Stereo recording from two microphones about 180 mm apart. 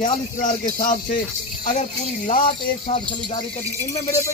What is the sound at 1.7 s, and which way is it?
Speech, 45° left (ahead or behind).